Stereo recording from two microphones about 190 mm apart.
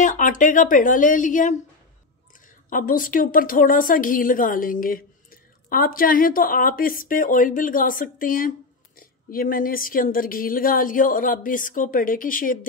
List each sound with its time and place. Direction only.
0.0 s a woman's voice: 45° left (ahead or behind)
2.7 s a woman's voice: 45° left (ahead or behind)